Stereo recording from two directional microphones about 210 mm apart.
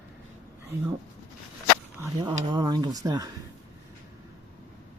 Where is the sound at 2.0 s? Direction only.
15° right (ahead or behind).